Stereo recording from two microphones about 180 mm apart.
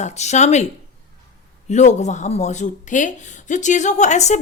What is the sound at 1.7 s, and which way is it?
A woman's voice, 40° left (ahead or behind).